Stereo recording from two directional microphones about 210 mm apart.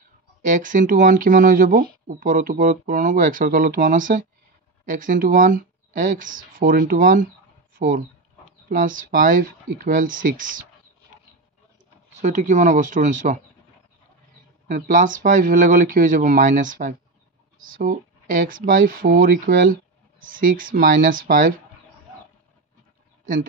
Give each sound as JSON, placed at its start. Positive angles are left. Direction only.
{"t": 0.4, "sound": "speech", "side_deg": -40}
{"t": 7.7, "sound": "a sound", "side_deg": -40}
{"t": 8.6, "sound": "speech", "side_deg": -40}
{"t": 12.2, "sound": "speech", "side_deg": -35}
{"t": 14.7, "sound": "speech", "side_deg": -40}